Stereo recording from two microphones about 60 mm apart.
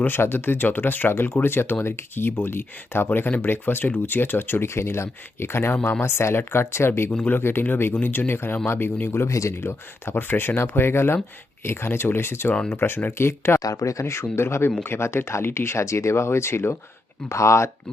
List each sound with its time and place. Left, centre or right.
0.0 s speech: left
3.1 s speech: left
9.6 s speech: left
13.6 s speech: left
14.0 s speech: left
17.2 s speech: left